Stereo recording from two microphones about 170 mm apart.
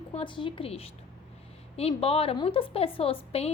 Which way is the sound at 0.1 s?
30° left (ahead or behind).